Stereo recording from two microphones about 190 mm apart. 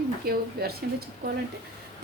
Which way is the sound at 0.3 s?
55° right (ahead or behind).